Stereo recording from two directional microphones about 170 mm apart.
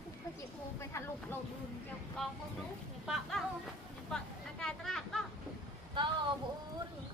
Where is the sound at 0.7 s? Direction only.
15° left (ahead or behind).